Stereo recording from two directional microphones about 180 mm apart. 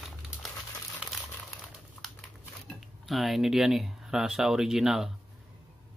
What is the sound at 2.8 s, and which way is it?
Speech, centre (ahead or behind).